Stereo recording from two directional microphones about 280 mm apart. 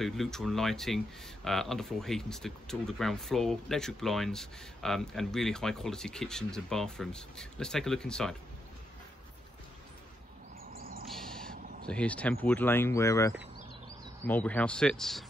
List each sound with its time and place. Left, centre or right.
0.0 s speech: centre
10.8 s bird: right
11.1 s owl: centre
11.9 s speech: centre